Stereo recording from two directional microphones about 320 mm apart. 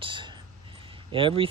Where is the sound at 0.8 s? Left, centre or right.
Centre.